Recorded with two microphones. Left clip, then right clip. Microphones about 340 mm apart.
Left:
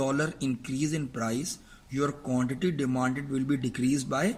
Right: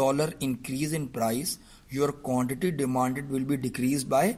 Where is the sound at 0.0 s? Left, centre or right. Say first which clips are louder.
Right 3 dB; centre.